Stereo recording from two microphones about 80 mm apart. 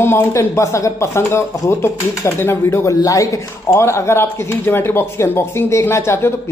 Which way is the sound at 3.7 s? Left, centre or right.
Left.